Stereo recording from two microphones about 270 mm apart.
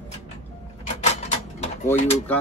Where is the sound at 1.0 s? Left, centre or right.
Left.